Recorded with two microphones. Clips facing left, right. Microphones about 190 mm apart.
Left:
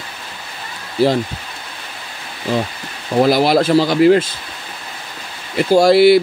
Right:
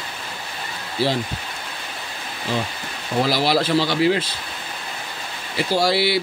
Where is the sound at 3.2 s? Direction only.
50° left (ahead or behind).